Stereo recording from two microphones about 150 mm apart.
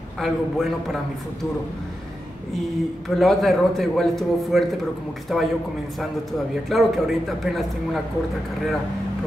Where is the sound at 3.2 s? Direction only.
Centre (ahead or behind).